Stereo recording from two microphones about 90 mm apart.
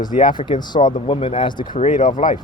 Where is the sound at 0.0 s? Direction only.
60° left (ahead or behind).